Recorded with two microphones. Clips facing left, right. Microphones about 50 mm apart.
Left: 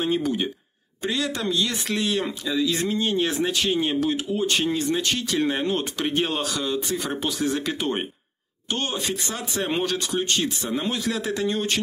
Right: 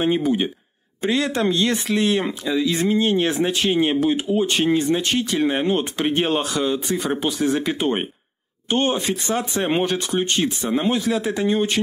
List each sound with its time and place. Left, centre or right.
0.0 s speech: right
11.0 s speech: centre